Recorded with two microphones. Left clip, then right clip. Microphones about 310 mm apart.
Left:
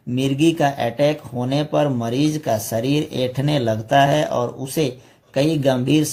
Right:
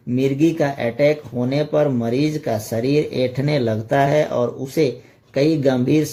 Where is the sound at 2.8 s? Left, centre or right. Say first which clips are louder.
Right 3 dB; left.